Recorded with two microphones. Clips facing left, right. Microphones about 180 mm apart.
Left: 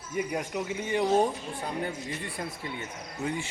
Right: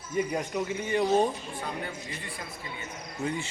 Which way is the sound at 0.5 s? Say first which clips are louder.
Right 1 dB; 15° left (ahead or behind).